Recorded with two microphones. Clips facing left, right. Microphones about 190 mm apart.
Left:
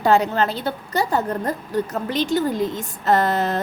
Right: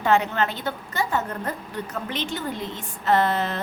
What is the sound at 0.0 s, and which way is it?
A woman's voice, 35° left (ahead or behind).